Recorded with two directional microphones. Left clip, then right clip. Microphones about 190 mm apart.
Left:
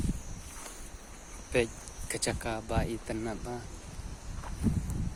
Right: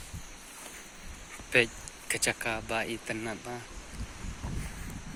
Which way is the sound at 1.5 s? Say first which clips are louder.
Right 4 dB; 10° left (ahead or behind).